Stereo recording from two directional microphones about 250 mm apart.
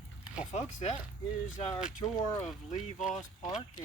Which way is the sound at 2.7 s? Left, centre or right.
Left.